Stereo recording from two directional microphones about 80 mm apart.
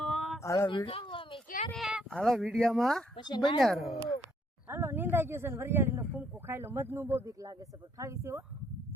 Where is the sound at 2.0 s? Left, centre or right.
Centre.